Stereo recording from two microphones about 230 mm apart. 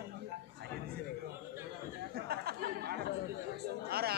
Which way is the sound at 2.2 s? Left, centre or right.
Right.